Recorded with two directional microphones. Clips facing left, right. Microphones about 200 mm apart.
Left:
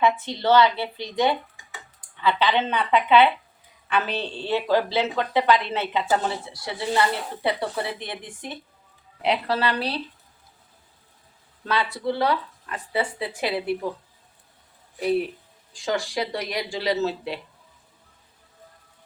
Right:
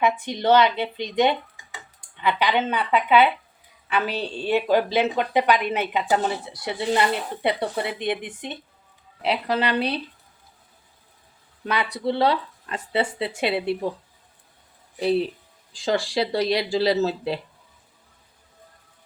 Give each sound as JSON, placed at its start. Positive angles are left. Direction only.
{"t": 0.0, "sound": "a woman's voice", "side_deg": -15}
{"t": 11.6, "sound": "speech", "side_deg": -15}
{"t": 14.9, "sound": "speech", "side_deg": -30}